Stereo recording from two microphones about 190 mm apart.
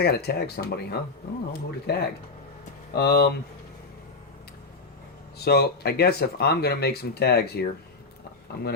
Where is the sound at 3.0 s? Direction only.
60° left (ahead or behind).